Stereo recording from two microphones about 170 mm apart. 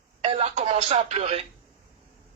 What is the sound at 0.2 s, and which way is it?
Speech, 40° right (ahead or behind).